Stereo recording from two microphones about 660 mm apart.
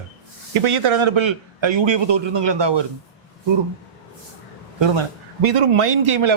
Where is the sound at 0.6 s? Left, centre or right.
Right.